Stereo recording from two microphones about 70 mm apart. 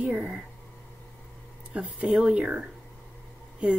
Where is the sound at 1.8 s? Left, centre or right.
Right.